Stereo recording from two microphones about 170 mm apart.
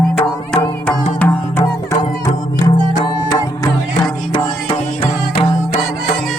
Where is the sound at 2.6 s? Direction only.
25° left (ahead or behind).